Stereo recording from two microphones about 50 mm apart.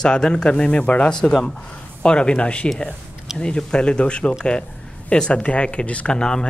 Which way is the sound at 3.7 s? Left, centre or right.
Left.